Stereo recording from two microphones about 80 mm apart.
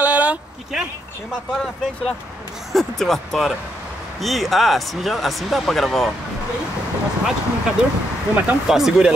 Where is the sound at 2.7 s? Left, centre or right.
Centre.